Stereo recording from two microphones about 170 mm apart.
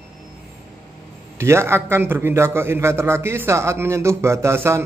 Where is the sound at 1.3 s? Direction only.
15° right (ahead or behind).